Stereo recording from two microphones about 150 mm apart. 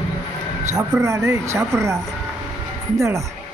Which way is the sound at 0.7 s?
20° right (ahead or behind).